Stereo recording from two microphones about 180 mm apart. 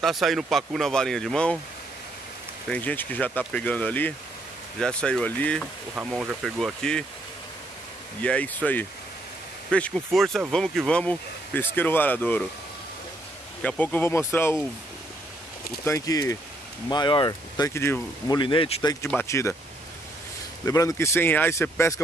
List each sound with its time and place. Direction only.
0.0 s speech: centre (ahead or behind)
2.7 s speech: 10° left (ahead or behind)
5.9 s speech: 5° right (ahead or behind)
8.2 s speech: 5° left (ahead or behind)
13.6 s speech: 5° left (ahead or behind)
15.8 s speech: 15° left (ahead or behind)
18.4 s speech: 30° left (ahead or behind)
20.6 s speech: 15° left (ahead or behind)